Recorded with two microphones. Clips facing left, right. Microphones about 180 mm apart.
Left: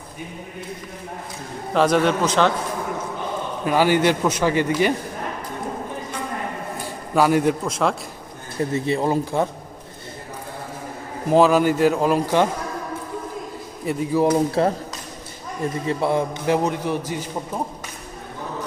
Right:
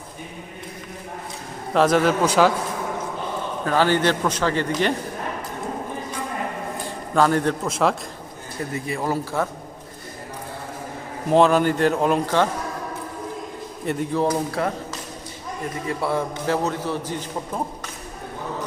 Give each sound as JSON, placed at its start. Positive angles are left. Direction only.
{"t": 1.7, "sound": "a man's voice", "side_deg": 0}
{"t": 3.6, "sound": "a man's voice", "side_deg": 10}
{"t": 7.1, "sound": "a man's voice", "side_deg": 10}
{"t": 7.6, "sound": "a man's voice", "side_deg": 0}
{"t": 8.7, "sound": "a man's voice", "side_deg": 25}
{"t": 11.3, "sound": "a man's voice", "side_deg": 5}
{"t": 13.8, "sound": "a man's voice", "side_deg": 5}
{"t": 15.9, "sound": "a man's voice", "side_deg": 20}